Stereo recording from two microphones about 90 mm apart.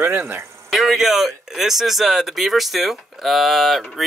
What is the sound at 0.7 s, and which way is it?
Speech, centre (ahead or behind).